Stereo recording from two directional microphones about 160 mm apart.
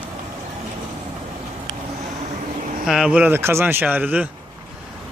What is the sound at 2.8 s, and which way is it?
Speech, 5° right (ahead or behind).